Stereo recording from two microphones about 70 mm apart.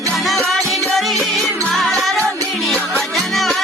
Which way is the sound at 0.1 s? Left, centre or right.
Centre.